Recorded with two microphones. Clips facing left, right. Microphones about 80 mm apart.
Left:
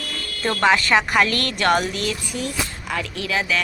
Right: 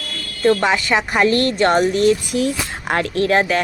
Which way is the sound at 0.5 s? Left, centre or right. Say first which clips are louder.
Even; centre.